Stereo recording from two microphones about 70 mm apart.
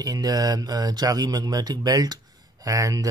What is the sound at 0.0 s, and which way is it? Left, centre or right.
Speech, right.